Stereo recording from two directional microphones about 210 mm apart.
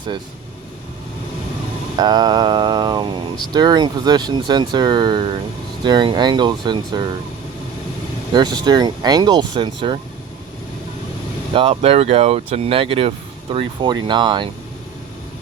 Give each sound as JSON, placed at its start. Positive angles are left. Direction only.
{"t": 2.0, "sound": "mantra", "side_deg": -20}
{"t": 3.5, "sound": "speech", "side_deg": -20}
{"t": 8.3, "sound": "speech", "side_deg": -20}
{"t": 11.5, "sound": "speech", "side_deg": -25}